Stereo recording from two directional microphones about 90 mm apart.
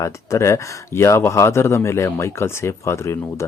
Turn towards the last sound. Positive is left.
turn(degrees=30)  # may be behind; listen again after turning